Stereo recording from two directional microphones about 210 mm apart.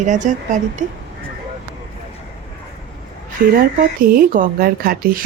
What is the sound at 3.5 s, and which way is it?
Speech, 40° right (ahead or behind).